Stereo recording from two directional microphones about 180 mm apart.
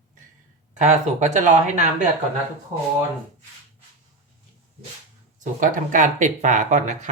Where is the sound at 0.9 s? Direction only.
40° right (ahead or behind).